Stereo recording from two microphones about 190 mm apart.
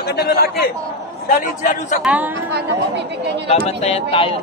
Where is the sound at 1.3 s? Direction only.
45° left (ahead or behind).